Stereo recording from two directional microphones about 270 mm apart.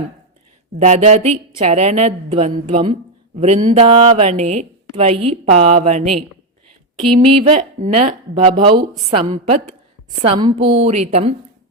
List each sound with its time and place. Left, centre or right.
0.8 s speech: right
7.2 s speech: right